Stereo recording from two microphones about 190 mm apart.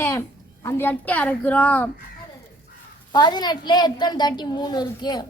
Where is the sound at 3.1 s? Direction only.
20° left (ahead or behind).